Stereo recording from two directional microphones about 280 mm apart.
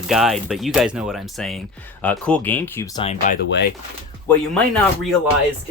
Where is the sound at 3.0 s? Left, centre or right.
Left.